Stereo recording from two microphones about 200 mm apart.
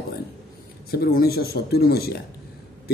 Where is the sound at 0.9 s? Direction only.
50° left (ahead or behind).